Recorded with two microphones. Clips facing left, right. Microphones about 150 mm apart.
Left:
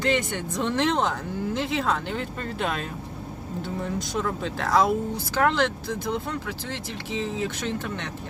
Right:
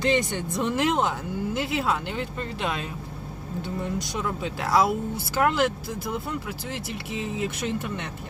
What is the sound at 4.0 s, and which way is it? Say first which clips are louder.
Speech: left 2 dB; centre (ahead or behind).